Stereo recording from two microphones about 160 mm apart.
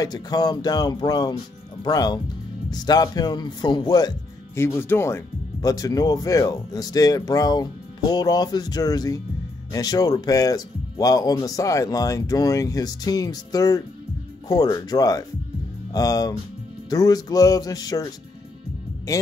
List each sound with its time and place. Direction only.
0.0 s speech: 25° left (ahead or behind)
4.6 s speech: 15° left (ahead or behind)